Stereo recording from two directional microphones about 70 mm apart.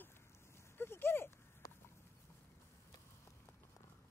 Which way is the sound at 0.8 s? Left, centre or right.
Left.